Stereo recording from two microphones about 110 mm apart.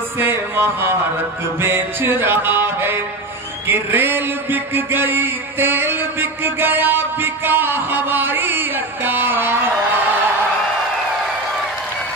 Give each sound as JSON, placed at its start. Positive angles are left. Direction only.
{"t": 0.2, "sound": "a man's voice", "side_deg": -20}